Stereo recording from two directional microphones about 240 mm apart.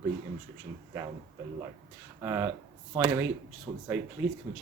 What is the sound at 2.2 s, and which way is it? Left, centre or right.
Speech, centre.